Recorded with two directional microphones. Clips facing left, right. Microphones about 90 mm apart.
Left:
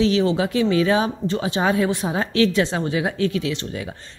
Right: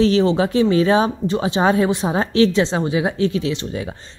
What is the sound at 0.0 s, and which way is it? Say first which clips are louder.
A woman's voice: right 3 dB; 40° right (ahead or behind).